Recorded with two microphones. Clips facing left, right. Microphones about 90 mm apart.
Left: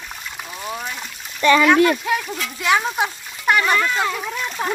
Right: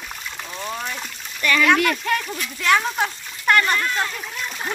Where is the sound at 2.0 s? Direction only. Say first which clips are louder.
Left 1 dB; 5° left (ahead or behind).